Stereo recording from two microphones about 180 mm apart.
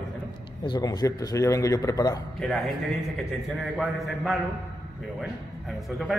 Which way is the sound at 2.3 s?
Centre (ahead or behind).